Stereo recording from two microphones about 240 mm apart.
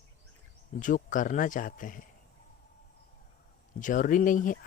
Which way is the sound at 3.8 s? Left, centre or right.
Left.